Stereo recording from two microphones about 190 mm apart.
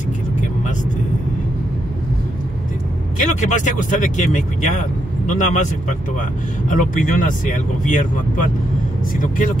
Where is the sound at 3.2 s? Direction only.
40° left (ahead or behind).